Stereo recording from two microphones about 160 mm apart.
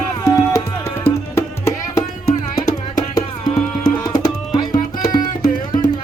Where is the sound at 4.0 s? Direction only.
25° left (ahead or behind).